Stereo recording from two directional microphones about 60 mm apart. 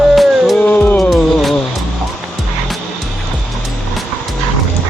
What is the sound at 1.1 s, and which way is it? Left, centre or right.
Music, centre.